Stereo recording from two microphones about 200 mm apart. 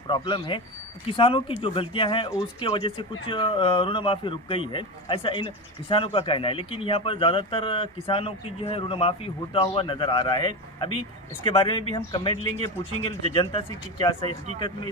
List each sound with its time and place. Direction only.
0.1 s speech: 25° left (ahead or behind)